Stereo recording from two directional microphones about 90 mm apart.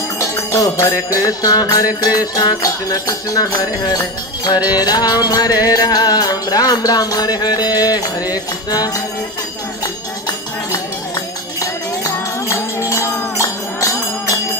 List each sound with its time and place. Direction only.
0.2 s music: 35° left (ahead or behind)
11.6 s music: 35° left (ahead or behind)